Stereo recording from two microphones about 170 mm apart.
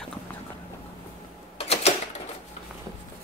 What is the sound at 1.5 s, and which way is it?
Typewriter, 40° left (ahead or behind).